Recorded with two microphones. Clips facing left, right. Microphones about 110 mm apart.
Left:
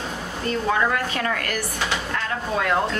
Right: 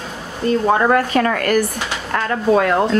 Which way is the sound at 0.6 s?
50° right (ahead or behind).